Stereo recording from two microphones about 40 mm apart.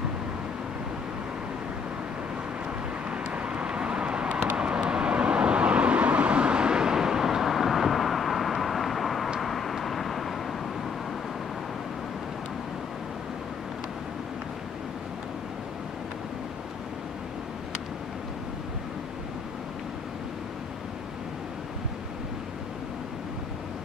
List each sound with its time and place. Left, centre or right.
3.1 s vehicle: right; by 10.3 s centre